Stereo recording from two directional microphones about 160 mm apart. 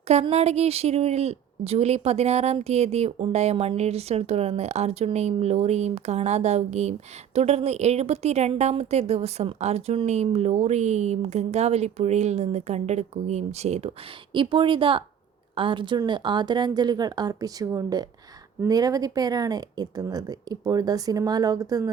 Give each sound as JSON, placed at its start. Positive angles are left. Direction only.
{"t": 0.1, "sound": "a woman's voice", "side_deg": -40}
{"t": 14.3, "sound": "a woman's voice", "side_deg": -30}